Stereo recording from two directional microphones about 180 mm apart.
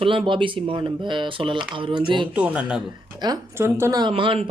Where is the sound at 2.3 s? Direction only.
5° right (ahead or behind).